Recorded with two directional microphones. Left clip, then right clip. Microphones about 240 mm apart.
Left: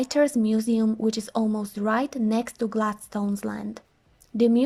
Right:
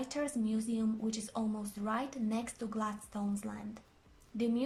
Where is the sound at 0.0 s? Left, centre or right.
Left.